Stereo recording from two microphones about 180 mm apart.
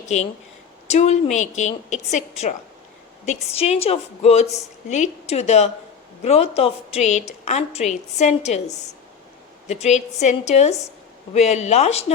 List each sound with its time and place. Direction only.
0.9 s a woman's voice: 40° left (ahead or behind)